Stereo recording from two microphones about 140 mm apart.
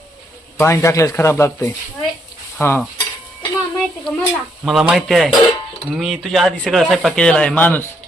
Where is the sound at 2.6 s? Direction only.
15° left (ahead or behind).